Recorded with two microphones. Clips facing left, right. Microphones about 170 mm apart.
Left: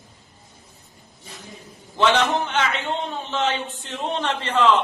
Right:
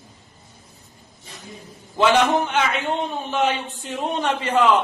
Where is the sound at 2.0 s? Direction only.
10° right (ahead or behind).